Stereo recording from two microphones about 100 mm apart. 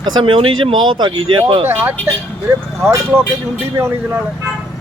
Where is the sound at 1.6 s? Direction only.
20° right (ahead or behind).